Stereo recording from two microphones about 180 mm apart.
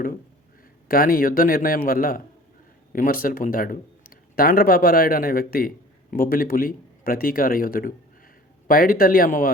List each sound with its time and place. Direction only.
0.9 s a man's voice: 55° left (ahead or behind)